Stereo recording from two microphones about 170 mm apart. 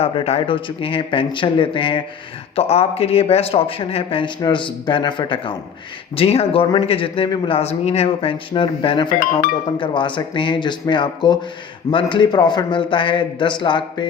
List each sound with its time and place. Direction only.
0.0 s a man's voice: 35° left (ahead or behind)